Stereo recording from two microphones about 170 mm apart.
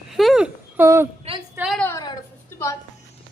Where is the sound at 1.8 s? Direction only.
20° left (ahead or behind).